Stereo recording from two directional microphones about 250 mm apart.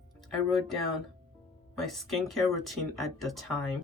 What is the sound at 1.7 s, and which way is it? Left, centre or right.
Speech, centre.